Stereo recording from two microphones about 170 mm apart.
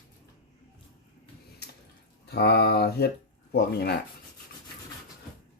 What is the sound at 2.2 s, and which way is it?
Speech, 75° left (ahead or behind).